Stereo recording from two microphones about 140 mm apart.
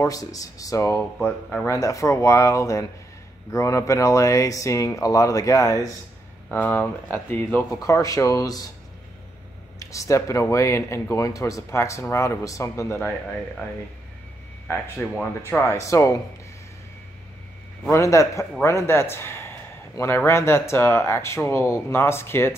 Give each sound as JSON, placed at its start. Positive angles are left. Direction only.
{"t": 0.0, "sound": "speech", "side_deg": 25}
{"t": 6.5, "sound": "speech", "side_deg": 15}
{"t": 9.8, "sound": "speech", "side_deg": 20}
{"t": 15.0, "sound": "speech", "side_deg": 10}
{"t": 17.9, "sound": "speech", "side_deg": 20}